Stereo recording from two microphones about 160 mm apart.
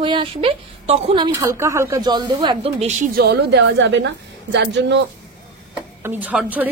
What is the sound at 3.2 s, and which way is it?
A woman's voice, 85° right.